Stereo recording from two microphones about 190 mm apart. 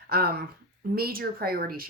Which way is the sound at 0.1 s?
55° right (ahead or behind).